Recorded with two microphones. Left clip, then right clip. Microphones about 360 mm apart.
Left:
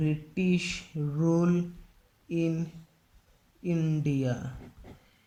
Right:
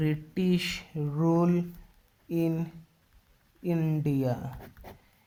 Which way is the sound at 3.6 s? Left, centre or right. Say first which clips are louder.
Right 1 dB; centre.